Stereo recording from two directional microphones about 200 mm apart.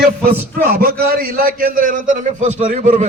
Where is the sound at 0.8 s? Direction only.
50° right (ahead or behind).